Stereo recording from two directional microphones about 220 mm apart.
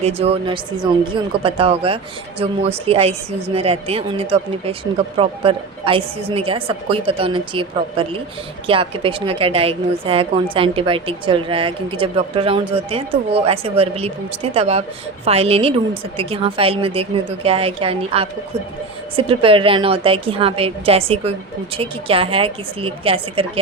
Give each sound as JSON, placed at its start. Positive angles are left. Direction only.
{"t": 0.0, "sound": "a woman's voice", "side_deg": -25}